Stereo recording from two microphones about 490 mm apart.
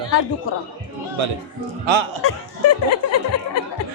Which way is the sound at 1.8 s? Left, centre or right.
Right.